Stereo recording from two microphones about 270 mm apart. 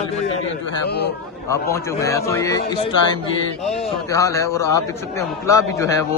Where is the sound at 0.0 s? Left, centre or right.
Left.